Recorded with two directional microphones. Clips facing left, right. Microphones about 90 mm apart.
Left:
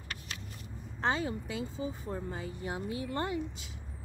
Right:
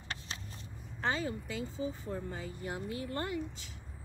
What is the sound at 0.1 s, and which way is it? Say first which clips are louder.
Vehicle: even; 30° right (ahead or behind).